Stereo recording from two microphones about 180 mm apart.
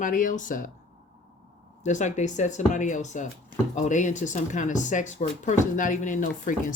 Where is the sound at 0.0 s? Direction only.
45° left (ahead or behind).